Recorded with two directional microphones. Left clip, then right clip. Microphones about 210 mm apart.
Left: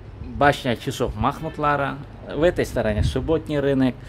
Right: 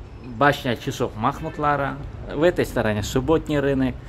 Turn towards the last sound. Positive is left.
turn(degrees=20)  # may be behind; listen again after turning